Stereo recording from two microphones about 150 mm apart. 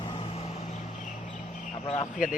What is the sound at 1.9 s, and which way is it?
Speech, 50° left (ahead or behind).